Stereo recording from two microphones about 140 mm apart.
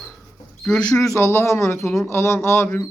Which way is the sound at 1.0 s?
20° left (ahead or behind).